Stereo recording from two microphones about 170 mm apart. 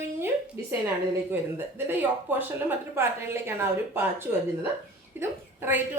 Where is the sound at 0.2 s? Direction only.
15° right (ahead or behind).